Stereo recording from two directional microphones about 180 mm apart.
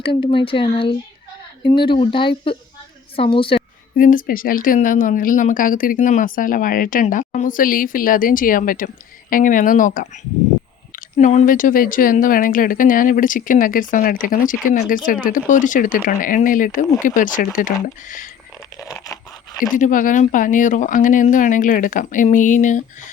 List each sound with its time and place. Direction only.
0.0 s speech: 30° left (ahead or behind)
3.9 s speech: 50° left (ahead or behind)
18.8 s a sound: 20° left (ahead or behind)
19.7 s speech: 45° left (ahead or behind)